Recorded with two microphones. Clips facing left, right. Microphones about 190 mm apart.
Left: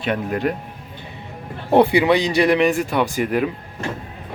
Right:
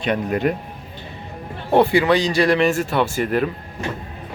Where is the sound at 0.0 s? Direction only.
Centre (ahead or behind).